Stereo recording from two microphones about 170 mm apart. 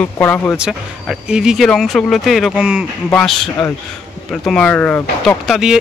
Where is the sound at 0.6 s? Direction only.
5° right (ahead or behind).